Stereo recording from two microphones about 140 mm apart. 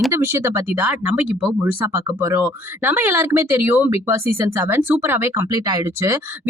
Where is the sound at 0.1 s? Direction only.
15° right (ahead or behind).